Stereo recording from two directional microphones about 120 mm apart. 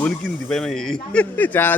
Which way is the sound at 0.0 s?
5° left (ahead or behind).